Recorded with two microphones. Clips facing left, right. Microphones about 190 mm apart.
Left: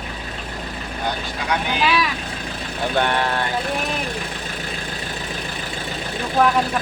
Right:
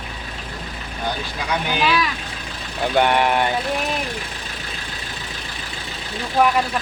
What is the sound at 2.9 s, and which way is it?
Speech, 15° right (ahead or behind).